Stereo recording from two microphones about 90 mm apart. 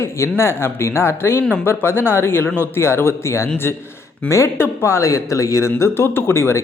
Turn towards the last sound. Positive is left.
turn(degrees=30)  # may be behind; listen again after turning